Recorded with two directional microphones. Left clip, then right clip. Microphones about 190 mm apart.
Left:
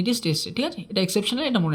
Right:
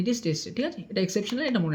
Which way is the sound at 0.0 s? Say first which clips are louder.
Left 3 dB; 35° left (ahead or behind).